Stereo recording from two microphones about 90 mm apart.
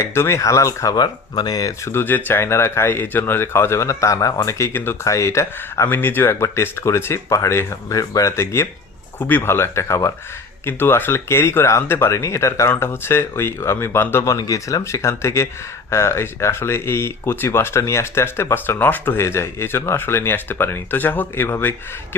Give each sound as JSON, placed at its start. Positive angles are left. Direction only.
{"t": 0.0, "sound": "speech", "side_deg": 30}
{"t": 0.9, "sound": "speech", "side_deg": 50}
{"t": 5.9, "sound": "speech", "side_deg": 25}
{"t": 14.3, "sound": "speech", "side_deg": 40}